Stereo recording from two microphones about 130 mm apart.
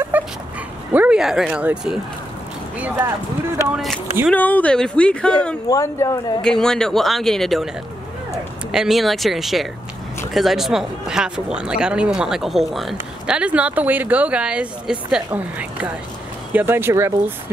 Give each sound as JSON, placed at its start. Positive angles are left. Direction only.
{"t": 0.1, "sound": "dog", "side_deg": -15}
{"t": 0.9, "sound": "speech", "side_deg": -10}
{"t": 3.0, "sound": "speech", "side_deg": -15}
{"t": 3.7, "sound": "speech", "side_deg": 0}
{"t": 4.3, "sound": "speech", "side_deg": 10}
{"t": 5.7, "sound": "speech", "side_deg": 25}
{"t": 6.4, "sound": "speech", "side_deg": 5}
{"t": 8.7, "sound": "speech", "side_deg": 0}